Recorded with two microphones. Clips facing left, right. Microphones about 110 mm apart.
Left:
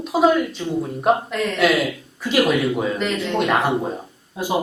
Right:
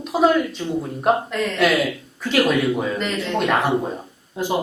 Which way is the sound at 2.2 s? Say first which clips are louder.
Even; 15° left (ahead or behind).